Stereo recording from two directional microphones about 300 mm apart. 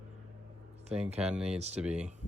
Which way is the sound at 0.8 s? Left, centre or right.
Right.